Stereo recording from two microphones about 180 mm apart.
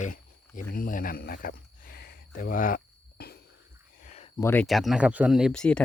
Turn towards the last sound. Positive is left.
turn(degrees=5)  # may be behind; listen again after turning